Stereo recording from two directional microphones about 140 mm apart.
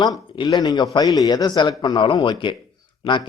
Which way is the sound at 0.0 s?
25° left (ahead or behind).